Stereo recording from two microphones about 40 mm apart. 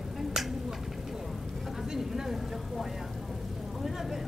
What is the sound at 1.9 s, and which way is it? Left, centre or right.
Vehicle, centre.